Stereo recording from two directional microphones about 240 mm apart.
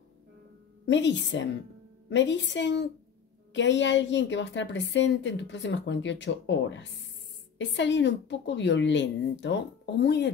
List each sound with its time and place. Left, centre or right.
0.8 s a woman's voice: left